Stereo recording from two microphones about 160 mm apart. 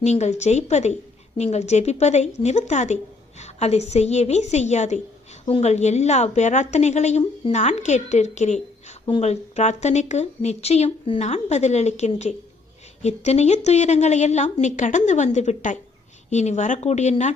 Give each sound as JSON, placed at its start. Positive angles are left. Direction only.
{"t": 0.0, "sound": "speech", "side_deg": 45}